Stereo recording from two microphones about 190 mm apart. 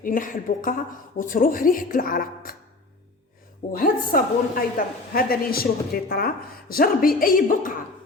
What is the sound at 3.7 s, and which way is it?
Speech, 50° left (ahead or behind).